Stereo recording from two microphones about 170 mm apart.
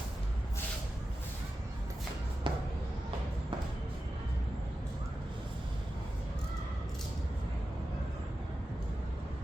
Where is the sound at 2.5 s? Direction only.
30° right (ahead or behind).